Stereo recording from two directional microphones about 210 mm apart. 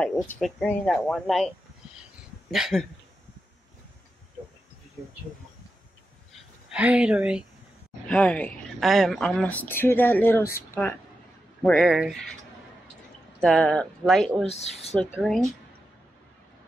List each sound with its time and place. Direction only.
0.0 s speech: 5° left (ahead or behind)
2.5 s speech: centre (ahead or behind)
6.7 s speech: 5° right (ahead or behind); by 11.0 s 10° left (ahead or behind)
11.6 s speech: centre (ahead or behind)
13.4 s speech: 5° left (ahead or behind)
14.5 s speech: 30° left (ahead or behind)
15.1 s speech: centre (ahead or behind)